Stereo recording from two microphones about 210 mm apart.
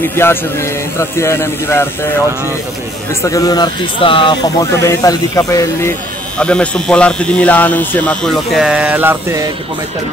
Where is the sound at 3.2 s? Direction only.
15° left (ahead or behind).